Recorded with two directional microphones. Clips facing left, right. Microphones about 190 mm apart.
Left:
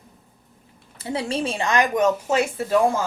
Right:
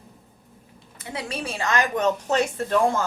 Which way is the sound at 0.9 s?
30° left (ahead or behind).